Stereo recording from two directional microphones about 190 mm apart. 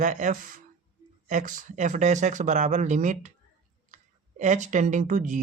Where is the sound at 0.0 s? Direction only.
40° right (ahead or behind).